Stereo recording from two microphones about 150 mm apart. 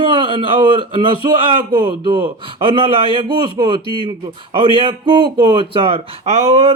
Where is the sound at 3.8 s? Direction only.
35° left (ahead or behind).